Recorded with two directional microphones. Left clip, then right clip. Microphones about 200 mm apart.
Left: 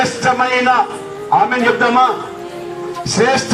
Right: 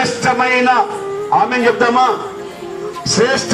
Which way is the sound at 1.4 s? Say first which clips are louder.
Even; 30° left (ahead or behind).